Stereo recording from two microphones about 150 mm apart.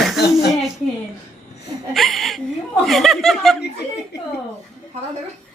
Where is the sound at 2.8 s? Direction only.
Centre (ahead or behind).